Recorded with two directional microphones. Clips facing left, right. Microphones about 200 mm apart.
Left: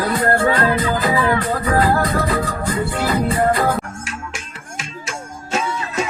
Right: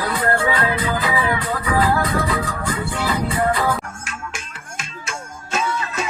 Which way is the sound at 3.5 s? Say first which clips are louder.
Left 3 dB; 40° left (ahead or behind).